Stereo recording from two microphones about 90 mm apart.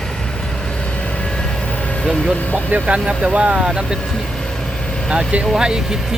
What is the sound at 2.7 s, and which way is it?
Speech, 15° right (ahead or behind).